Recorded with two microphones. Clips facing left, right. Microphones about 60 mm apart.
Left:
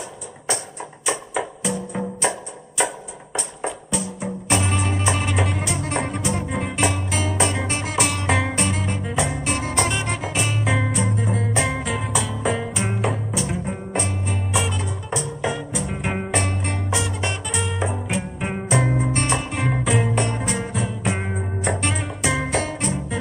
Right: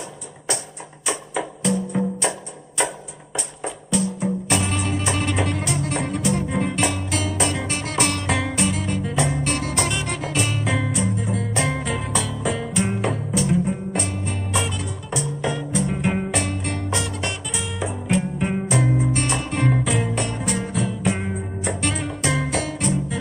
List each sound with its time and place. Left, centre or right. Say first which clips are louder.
1.0 s music: left 1 dB; centre
3.6 s music: right 4 dB; centre
5.9 s music: even; centre
6.2 s music: right 3 dB; centre